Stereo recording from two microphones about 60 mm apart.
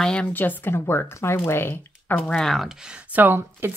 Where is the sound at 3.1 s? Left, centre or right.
Right.